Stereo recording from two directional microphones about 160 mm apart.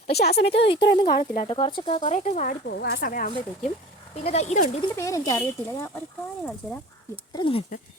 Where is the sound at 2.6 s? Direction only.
80° left; by 3.2 s 60° left (ahead or behind).